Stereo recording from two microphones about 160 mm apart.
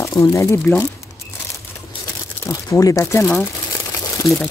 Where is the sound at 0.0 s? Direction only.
15° left (ahead or behind).